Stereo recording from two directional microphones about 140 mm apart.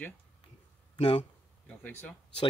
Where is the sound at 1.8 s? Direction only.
10° left (ahead or behind).